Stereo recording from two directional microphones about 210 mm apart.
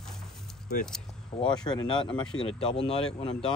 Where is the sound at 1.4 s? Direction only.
20° left (ahead or behind).